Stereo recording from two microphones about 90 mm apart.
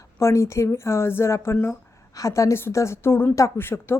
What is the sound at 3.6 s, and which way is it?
Speech, 25° left (ahead or behind).